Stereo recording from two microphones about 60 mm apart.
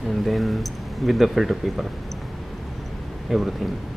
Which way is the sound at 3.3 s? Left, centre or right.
Centre.